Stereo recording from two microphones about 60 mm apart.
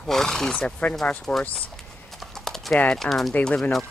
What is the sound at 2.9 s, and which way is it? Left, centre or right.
Speech, centre.